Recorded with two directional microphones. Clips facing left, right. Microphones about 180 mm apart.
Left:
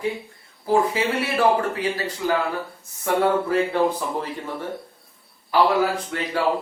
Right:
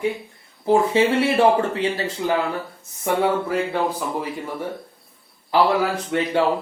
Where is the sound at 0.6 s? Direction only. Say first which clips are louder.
Right 4 dB; 25° right (ahead or behind).